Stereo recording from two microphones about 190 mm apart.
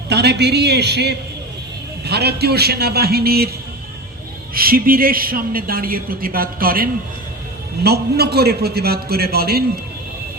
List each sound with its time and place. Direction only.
0.1 s a man's voice: 60° right (ahead or behind)
4.5 s a man's voice: 50° right (ahead or behind)
7.9 s a man's voice: 55° right (ahead or behind)